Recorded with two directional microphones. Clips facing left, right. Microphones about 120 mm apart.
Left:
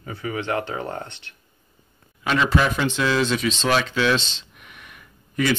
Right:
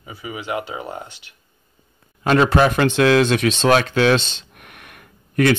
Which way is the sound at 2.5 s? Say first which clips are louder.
Right 5 dB; 60° right (ahead or behind).